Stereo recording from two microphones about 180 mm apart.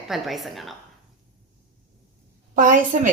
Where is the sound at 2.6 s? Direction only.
45° right (ahead or behind).